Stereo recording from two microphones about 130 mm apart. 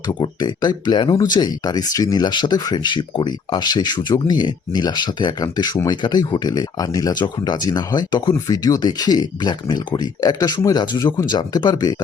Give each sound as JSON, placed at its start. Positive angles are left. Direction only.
{"t": 0.1, "sound": "speech", "side_deg": 35}